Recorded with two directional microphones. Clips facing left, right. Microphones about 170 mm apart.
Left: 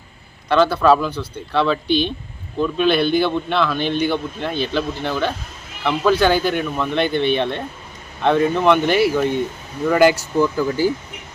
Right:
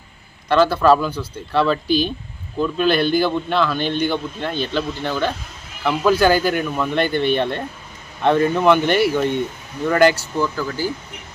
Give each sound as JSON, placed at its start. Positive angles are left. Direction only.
{"t": 0.4, "sound": "a man's voice", "side_deg": 0}
{"t": 10.5, "sound": "speech", "side_deg": 20}